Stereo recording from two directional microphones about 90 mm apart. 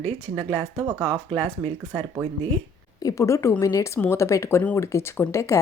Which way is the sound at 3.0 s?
40° left (ahead or behind).